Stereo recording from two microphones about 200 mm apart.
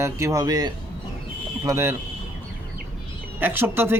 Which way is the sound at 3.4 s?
10° right (ahead or behind).